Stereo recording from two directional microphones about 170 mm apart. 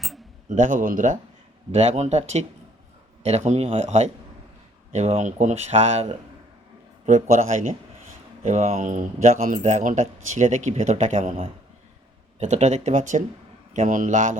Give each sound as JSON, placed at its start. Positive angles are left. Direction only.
{"t": 0.4, "sound": "speech", "side_deg": -50}